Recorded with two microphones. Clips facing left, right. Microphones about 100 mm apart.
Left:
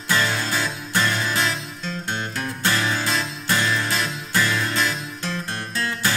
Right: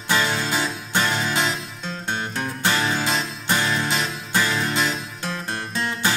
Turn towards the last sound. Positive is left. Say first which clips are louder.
# right 1 dB
turn(degrees=-20)  # may be behind; listen again after turning